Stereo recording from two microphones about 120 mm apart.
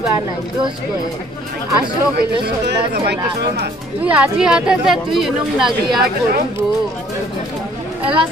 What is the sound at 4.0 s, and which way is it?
A woman's voice, 10° right (ahead or behind).